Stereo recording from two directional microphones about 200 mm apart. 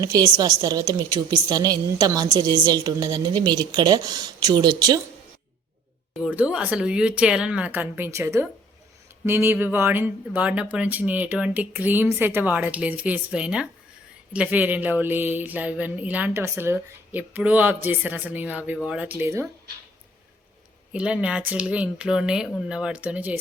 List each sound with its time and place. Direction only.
0.0 s a woman's voice: 20° right (ahead or behind)
6.2 s speech: 5° right (ahead or behind)
20.9 s speech: 5° right (ahead or behind)